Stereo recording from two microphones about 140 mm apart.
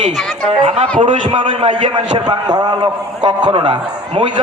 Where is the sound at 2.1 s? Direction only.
30° right (ahead or behind).